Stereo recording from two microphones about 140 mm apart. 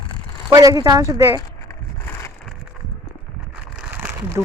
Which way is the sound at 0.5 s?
25° right (ahead or behind).